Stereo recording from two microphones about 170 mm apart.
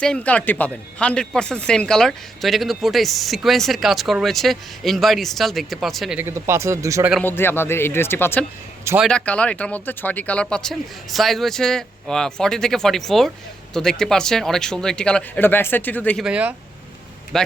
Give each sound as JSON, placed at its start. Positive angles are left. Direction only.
{"t": 0.0, "sound": "speech", "side_deg": 5}
{"t": 6.1, "sound": "speech", "side_deg": -15}
{"t": 7.3, "sound": "speech", "side_deg": 15}
{"t": 16.2, "sound": "speech", "side_deg": -10}